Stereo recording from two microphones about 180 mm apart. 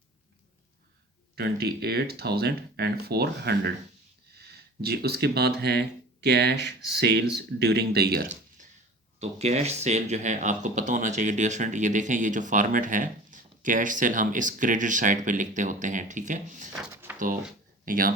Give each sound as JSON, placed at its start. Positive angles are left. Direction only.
{"t": 1.4, "sound": "speech", "side_deg": -60}
{"t": 9.1, "sound": "speech", "side_deg": -35}
{"t": 16.9, "sound": "a sound", "side_deg": -10}
{"t": 17.8, "sound": "speech", "side_deg": -50}